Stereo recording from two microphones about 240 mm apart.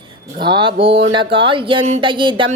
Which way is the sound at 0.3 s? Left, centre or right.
Centre.